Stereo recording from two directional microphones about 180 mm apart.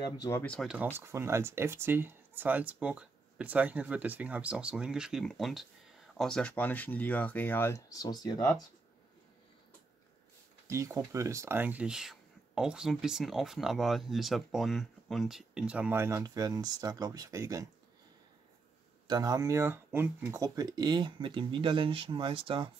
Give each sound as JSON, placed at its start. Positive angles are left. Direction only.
{"t": 0.2, "sound": "speech", "side_deg": 15}
{"t": 0.6, "sound": "speech", "side_deg": -5}
{"t": 10.7, "sound": "speech", "side_deg": -15}
{"t": 19.0, "sound": "speech", "side_deg": -20}